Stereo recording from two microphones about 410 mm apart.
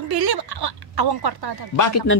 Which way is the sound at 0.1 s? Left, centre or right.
Right.